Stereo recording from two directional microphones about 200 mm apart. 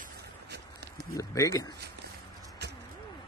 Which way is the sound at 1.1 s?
15° left (ahead or behind).